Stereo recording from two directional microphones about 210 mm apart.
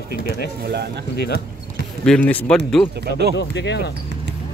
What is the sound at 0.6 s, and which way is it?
Speech, 50° right (ahead or behind).